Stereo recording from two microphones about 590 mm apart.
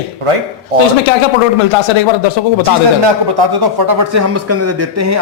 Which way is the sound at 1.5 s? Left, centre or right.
Left.